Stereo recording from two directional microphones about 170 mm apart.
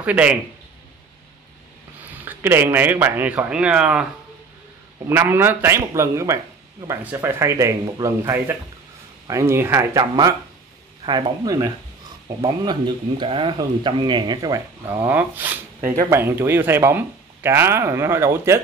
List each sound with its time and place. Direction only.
0.0 s speech: 10° right (ahead or behind)
2.1 s speech: 10° right (ahead or behind)
5.0 s speech: 15° right (ahead or behind)
14.9 s speech: 10° right (ahead or behind)